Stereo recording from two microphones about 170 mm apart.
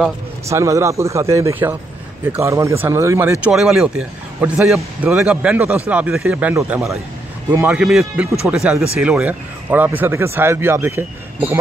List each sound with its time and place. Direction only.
0.5 s speech: 20° right (ahead or behind)